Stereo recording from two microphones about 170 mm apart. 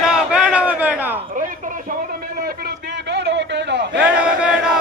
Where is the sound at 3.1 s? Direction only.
90° right.